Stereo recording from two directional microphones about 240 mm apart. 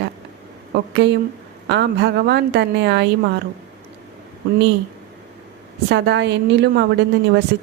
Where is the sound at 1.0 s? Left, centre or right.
Right.